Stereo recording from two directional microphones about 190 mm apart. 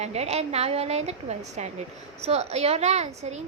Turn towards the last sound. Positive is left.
turn(degrees=-35)  # may be behind; listen again after turning